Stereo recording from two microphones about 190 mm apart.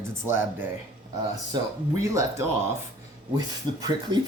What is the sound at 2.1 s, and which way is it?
Speech, 15° right (ahead or behind).